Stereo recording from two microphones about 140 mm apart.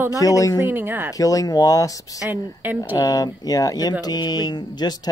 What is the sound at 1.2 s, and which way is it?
Speech, 25° left (ahead or behind).